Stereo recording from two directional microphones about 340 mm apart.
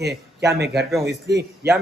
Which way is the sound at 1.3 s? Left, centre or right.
Right.